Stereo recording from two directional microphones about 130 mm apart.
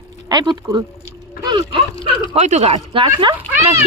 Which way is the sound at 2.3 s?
60° right (ahead or behind).